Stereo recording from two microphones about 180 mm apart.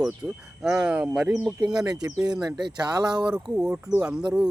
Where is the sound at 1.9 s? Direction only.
20° right (ahead or behind).